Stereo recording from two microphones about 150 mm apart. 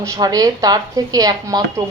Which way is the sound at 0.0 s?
25° right (ahead or behind).